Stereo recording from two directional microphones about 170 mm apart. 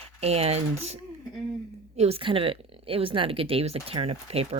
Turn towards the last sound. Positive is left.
turn(degrees=-35)  # may be behind; listen again after turning